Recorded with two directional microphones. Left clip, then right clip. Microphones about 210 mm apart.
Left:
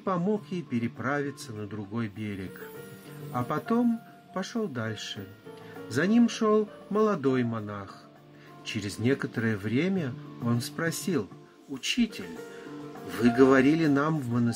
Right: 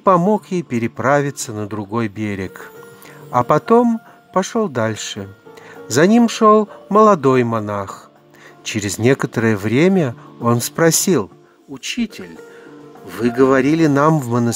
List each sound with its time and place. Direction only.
0.0 s speech: 50° right (ahead or behind)
13.1 s speech: 50° right (ahead or behind)